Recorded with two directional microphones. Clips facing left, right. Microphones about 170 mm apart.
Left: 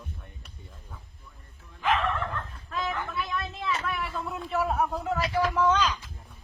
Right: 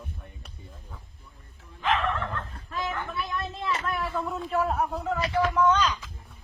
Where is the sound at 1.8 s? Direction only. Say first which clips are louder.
Even; centre (ahead or behind).